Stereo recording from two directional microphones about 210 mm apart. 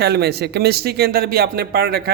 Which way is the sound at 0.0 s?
50° right (ahead or behind).